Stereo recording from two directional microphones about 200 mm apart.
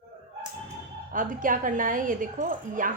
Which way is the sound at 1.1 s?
40° right (ahead or behind).